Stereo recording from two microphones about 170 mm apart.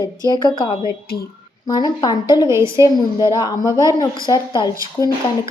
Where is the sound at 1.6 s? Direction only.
25° left (ahead or behind).